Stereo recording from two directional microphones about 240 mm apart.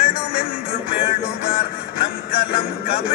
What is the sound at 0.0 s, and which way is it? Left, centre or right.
Music, left.